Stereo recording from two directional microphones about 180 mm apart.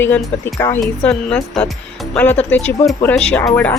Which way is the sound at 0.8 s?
5° left (ahead or behind).